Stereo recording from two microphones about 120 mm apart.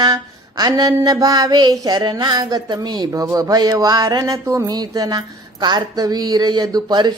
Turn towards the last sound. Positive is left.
turn(degrees=-35)  # may be behind; listen again after turning